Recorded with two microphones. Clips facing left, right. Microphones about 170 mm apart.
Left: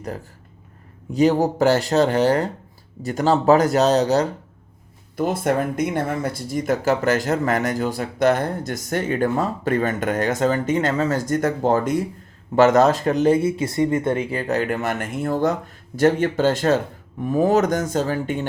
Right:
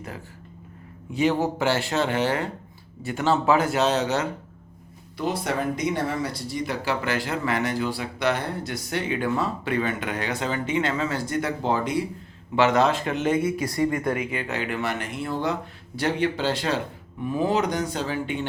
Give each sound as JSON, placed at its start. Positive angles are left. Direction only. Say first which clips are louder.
{"t": 1.1, "sound": "speech", "louder": "left 5 dB", "side_deg": 40}
{"t": 5.1, "sound": "speech", "louder": "left 6 dB", "side_deg": 50}